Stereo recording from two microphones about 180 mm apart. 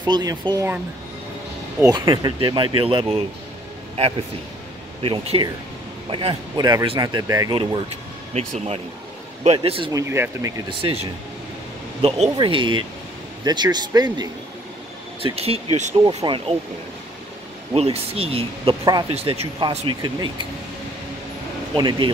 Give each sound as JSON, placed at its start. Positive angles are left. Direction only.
{"t": 0.0, "sound": "speech", "side_deg": -25}
{"t": 1.8, "sound": "speech", "side_deg": -20}
{"t": 5.0, "sound": "speech", "side_deg": -30}
{"t": 8.4, "sound": "speech", "side_deg": -35}
{"t": 9.9, "sound": "speech", "side_deg": -15}
{"t": 10.7, "sound": "speech", "side_deg": -30}
{"t": 12.3, "sound": "speech", "side_deg": -25}
{"t": 15.2, "sound": "speech", "side_deg": -35}
{"t": 17.7, "sound": "speech", "side_deg": -35}
{"t": 21.7, "sound": "speech", "side_deg": -25}